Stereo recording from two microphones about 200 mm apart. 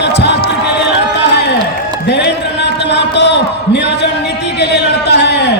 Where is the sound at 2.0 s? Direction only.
60° left (ahead or behind).